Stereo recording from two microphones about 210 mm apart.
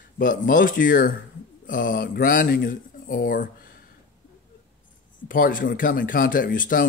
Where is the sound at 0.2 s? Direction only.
40° left (ahead or behind).